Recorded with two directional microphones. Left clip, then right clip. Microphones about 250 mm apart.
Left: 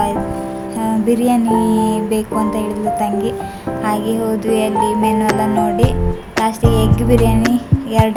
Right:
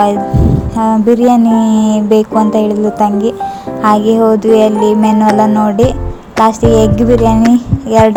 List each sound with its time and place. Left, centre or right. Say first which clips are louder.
0.8 s music: right 7 dB; right
7.5 s speech: right 8 dB; right